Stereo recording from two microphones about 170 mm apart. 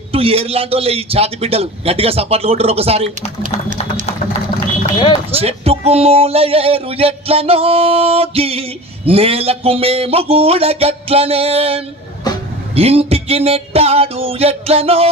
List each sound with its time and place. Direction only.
0.1 s speech: 35° right (ahead or behind)
4.9 s speech: 30° left (ahead or behind)
5.3 s speech: 35° right (ahead or behind)